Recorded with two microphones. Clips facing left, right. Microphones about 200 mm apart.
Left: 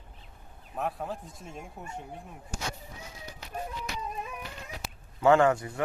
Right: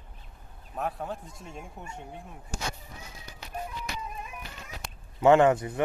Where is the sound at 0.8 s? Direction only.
Centre (ahead or behind).